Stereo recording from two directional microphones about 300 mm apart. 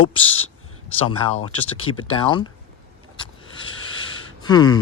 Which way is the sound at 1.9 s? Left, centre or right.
Centre.